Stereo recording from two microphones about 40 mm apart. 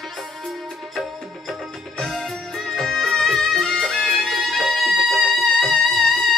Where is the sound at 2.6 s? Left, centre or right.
Centre.